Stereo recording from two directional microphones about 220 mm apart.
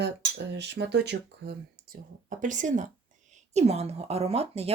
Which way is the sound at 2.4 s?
35° right (ahead or behind).